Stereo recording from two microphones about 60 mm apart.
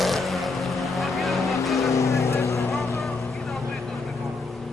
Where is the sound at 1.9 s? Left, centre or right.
Left.